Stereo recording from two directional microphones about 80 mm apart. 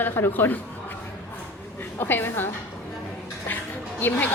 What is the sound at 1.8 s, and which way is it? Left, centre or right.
Speech, left.